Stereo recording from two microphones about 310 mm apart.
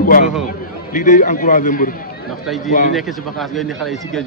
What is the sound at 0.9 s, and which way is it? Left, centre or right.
Speech, left.